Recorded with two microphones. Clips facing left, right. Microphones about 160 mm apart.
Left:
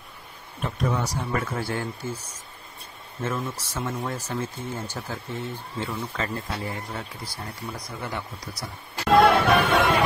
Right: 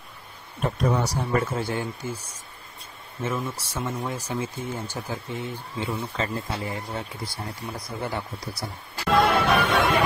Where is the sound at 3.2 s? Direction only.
10° right (ahead or behind); by 8.6 s 30° right (ahead or behind).